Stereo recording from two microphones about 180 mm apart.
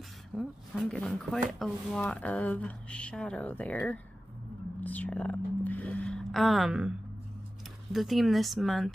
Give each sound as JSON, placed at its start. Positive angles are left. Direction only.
{"t": 0.4, "sound": "speech", "side_deg": 0}
{"t": 4.7, "sound": "whispering", "side_deg": 10}
{"t": 7.9, "sound": "speech", "side_deg": 0}